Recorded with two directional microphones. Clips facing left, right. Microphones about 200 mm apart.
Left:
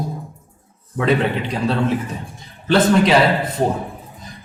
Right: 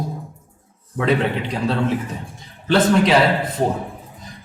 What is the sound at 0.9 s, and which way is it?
A man's voice, 15° left (ahead or behind).